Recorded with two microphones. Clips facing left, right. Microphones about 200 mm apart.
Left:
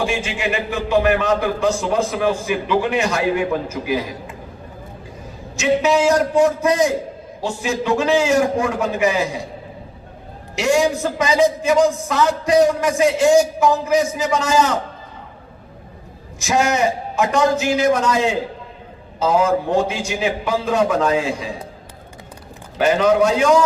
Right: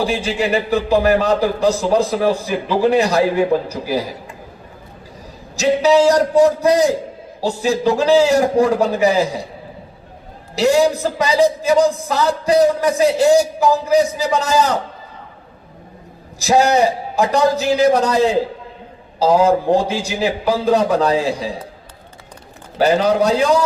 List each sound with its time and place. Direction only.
0.0 s a man's voice: 35° right (ahead or behind)
5.5 s a man's voice: 35° right (ahead or behind)
10.5 s a man's voice: 35° right (ahead or behind)
16.4 s a man's voice: 35° right (ahead or behind)
22.8 s a man's voice: 35° right (ahead or behind)